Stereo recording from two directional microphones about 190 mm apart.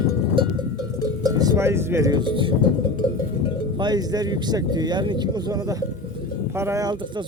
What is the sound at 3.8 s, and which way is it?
Speech, 20° right (ahead or behind).